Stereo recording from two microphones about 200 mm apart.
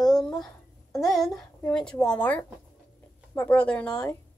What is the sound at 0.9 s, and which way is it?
A woman's voice, centre (ahead or behind).